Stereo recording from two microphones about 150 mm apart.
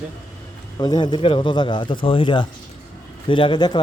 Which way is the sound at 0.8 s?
30° left (ahead or behind).